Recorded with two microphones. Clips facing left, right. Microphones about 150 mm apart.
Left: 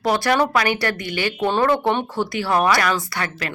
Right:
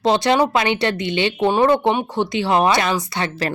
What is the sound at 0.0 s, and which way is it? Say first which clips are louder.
Speech: right 3 dB; 20° right (ahead or behind).